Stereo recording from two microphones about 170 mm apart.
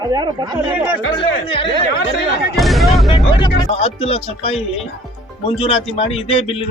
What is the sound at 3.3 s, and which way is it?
Speech, 30° left (ahead or behind).